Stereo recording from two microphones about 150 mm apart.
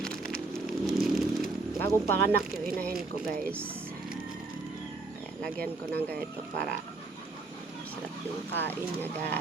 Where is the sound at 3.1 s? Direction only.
70° right (ahead or behind).